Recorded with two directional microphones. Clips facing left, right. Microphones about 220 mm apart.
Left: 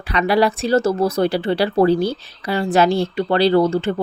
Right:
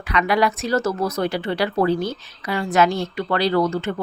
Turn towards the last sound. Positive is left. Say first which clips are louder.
# left 4 dB
turn(degrees=30)  # may be behind; listen again after turning